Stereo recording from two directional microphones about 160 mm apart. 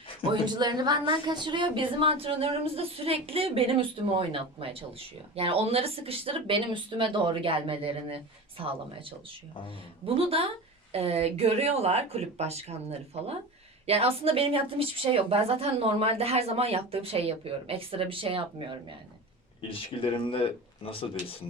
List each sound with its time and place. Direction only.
0.4 s a woman's voice: 25° right (ahead or behind)
10.2 s a woman's voice: 35° right (ahead or behind)
19.6 s speech: 35° left (ahead or behind)